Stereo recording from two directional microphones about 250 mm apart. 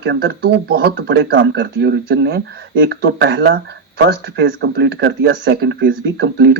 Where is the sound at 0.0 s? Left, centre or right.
Right.